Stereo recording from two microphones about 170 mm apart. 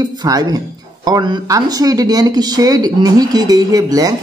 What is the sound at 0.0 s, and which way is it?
Speech, 25° right (ahead or behind).